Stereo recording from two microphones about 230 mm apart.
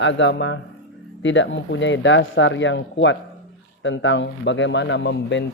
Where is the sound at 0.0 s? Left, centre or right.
Left.